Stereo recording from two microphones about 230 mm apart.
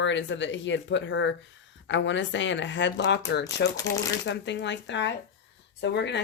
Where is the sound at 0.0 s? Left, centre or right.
Left.